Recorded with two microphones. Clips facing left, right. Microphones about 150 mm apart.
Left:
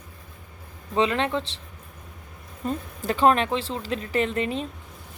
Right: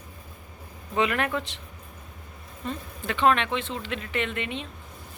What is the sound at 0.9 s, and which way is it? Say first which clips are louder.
Speech: left 2 dB; 25° left (ahead or behind).